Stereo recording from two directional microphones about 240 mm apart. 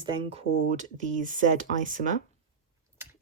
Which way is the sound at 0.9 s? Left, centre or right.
Right.